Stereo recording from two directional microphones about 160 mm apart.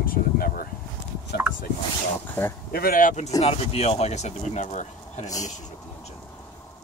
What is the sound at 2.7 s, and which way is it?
Speech, 65° left (ahead or behind).